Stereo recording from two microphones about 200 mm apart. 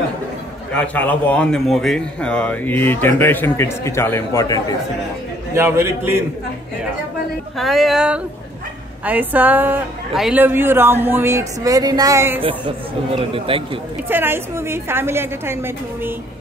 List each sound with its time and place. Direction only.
0.7 s speech: 10° left (ahead or behind)
5.5 s a woman's voice: 10° right (ahead or behind)
7.5 s a sound: centre (ahead or behind)
9.0 s a woman's voice: 10° right (ahead or behind)
12.4 s speech: 25° right (ahead or behind)
14.0 s a woman's voice: 10° right (ahead or behind)